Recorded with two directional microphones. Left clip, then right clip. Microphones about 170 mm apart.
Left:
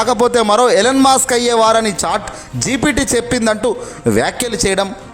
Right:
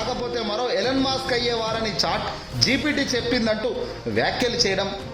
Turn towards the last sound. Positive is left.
turn(degrees=40)  # may be behind; listen again after turning